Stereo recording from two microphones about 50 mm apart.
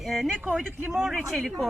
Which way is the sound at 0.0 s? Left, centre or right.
Centre.